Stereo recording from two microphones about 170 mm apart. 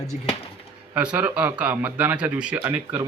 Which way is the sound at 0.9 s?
10° right (ahead or behind).